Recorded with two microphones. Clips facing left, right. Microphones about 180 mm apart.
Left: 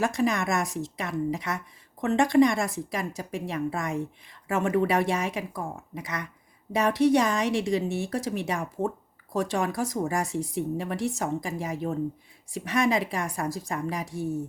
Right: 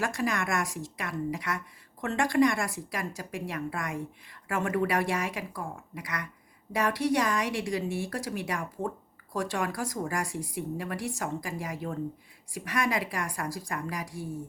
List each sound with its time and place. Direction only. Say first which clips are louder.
0.0 s a woman's voice: left 5 dB; 20° left (ahead or behind)